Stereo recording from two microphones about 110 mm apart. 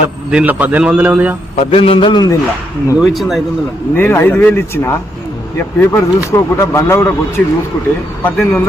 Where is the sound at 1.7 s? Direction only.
55° left (ahead or behind).